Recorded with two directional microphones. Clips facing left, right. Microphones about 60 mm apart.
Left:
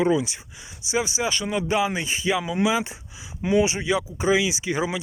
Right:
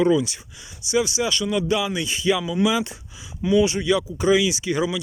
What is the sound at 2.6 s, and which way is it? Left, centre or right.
Speech, left.